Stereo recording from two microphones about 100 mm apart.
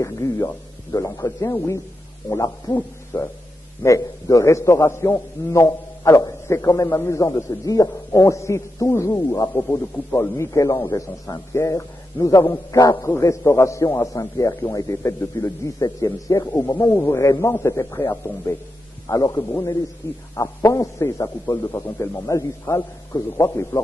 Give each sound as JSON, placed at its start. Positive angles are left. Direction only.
{"t": 0.0, "sound": "a man's voice", "side_deg": 35}
{"t": 2.7, "sound": "hoot", "side_deg": 25}
{"t": 3.8, "sound": "a man's voice", "side_deg": 30}
{"t": 16.5, "sound": "a man's voice", "side_deg": 25}
{"t": 20.0, "sound": "a man's voice", "side_deg": 25}
{"t": 21.7, "sound": "a man's voice", "side_deg": 25}